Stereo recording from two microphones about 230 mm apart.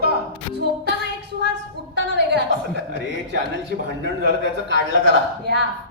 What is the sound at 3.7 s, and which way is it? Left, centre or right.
Speech, right.